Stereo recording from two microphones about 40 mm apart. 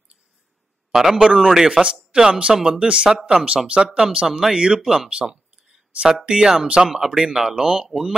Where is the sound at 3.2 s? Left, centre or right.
Centre.